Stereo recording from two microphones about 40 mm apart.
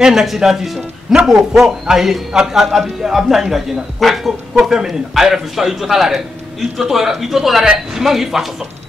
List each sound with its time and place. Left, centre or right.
0.0 s a man's voice: centre
8.0 s a man's voice: centre